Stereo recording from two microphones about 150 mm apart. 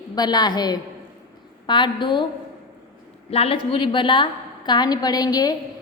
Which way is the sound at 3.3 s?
40° left (ahead or behind).